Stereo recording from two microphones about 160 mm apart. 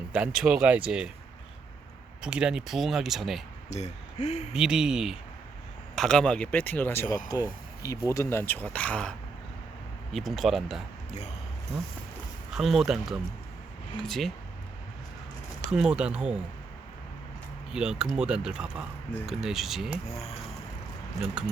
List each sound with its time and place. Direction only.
0.1 s speech: 5° right (ahead or behind)
2.2 s speech: 5° right (ahead or behind)
3.7 s speech: 45° left (ahead or behind)
4.5 s speech: 5° right (ahead or behind)
12.5 s speech: centre (ahead or behind)
15.7 s speech: 5° right (ahead or behind)
17.7 s speech: 5° right (ahead or behind)